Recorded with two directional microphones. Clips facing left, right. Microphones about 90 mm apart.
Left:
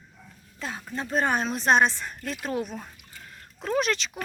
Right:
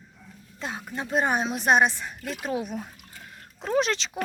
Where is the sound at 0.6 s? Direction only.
20° right (ahead or behind).